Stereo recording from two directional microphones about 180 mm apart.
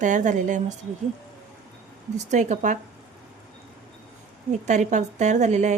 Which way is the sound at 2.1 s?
40° right (ahead or behind).